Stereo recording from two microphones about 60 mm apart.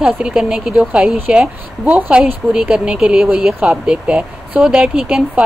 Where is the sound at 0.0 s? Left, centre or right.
Centre.